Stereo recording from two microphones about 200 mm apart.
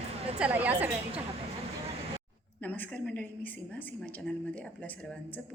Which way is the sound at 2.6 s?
10° left (ahead or behind).